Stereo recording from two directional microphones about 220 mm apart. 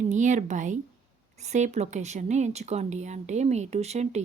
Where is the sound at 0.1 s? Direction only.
35° right (ahead or behind).